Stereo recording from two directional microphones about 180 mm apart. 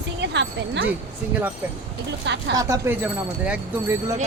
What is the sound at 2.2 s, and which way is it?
Speech, 80° right.